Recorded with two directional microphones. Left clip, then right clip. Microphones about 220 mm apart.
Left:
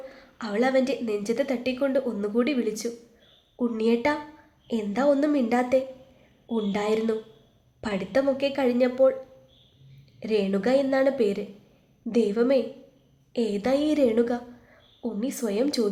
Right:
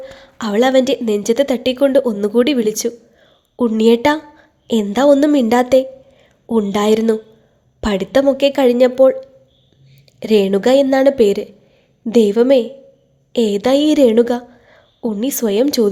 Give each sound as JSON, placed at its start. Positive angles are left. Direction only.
{"t": 0.0, "sound": "a woman's voice", "side_deg": -40}
{"t": 10.2, "sound": "a woman's voice", "side_deg": -45}